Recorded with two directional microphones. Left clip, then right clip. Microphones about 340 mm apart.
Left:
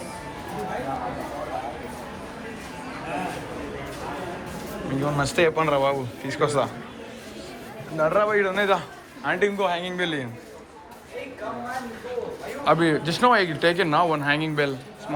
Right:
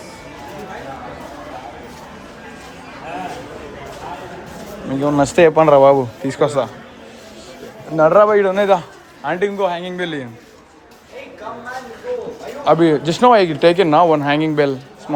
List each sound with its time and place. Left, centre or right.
5.1 s speech: centre
7.9 s speech: right
12.1 s a sound: centre
12.6 s speech: centre